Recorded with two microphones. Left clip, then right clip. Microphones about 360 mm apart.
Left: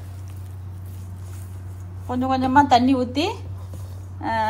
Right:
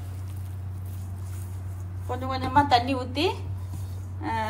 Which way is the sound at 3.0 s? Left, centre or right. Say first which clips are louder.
Left 3 dB; left.